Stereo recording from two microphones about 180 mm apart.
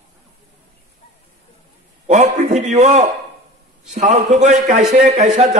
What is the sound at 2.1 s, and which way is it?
A man's voice, 40° right (ahead or behind).